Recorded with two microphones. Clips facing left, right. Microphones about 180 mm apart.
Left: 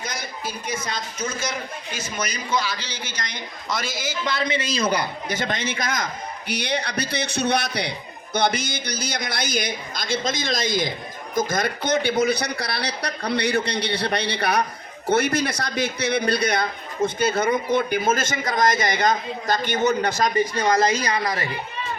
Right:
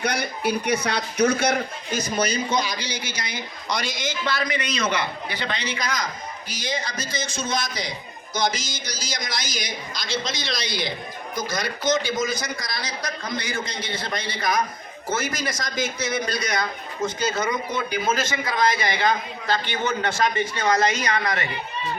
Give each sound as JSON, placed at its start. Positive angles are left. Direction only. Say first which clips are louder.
{"t": 0.0, "sound": "speech", "louder": "right 7 dB", "side_deg": -65}
{"t": 1.9, "sound": "a man's voice", "louder": "right 7 dB", "side_deg": -40}
{"t": 4.3, "sound": "a man's voice", "louder": "left 2 dB", "side_deg": 20}
{"t": 6.5, "sound": "a man's voice", "louder": "left 4 dB", "side_deg": 65}